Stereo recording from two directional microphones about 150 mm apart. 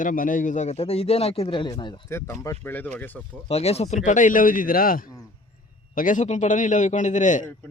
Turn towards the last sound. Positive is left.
turn(degrees=55)  # may be behind; listen again after turning